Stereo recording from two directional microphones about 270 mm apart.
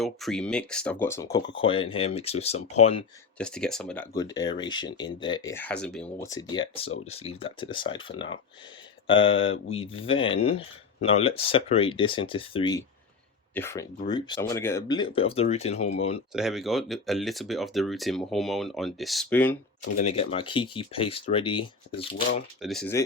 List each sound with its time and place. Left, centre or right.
0.0 s speech: centre; by 3.0 s left
3.3 s speech: centre; by 16.2 s left
16.3 s speech: centre
20.0 s speech: left
22.6 s speech: centre